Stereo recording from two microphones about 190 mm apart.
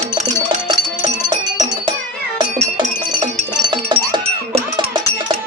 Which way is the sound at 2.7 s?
25° right (ahead or behind).